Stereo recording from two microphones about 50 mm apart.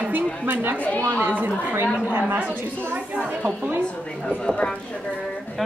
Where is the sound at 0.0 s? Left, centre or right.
Right.